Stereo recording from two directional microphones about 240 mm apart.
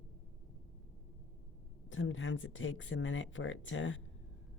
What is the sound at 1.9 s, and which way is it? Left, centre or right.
Speech, left.